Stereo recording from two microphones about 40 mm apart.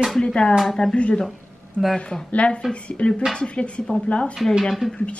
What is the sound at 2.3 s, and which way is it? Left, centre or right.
Speech, left.